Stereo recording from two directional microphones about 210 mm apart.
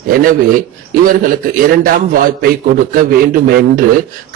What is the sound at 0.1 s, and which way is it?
A man's voice, 40° right (ahead or behind).